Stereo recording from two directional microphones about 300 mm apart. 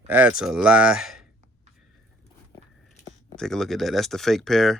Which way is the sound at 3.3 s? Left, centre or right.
Centre.